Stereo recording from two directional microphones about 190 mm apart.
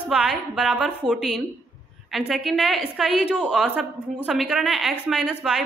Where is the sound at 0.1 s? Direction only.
Centre (ahead or behind).